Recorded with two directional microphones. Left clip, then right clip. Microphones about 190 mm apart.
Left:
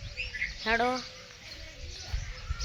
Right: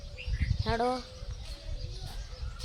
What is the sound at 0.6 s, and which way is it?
Speech, 20° left (ahead or behind).